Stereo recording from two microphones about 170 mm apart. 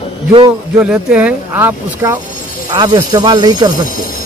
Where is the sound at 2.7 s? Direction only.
25° right (ahead or behind).